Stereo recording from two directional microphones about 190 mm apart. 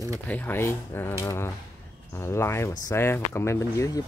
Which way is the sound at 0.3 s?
10° left (ahead or behind).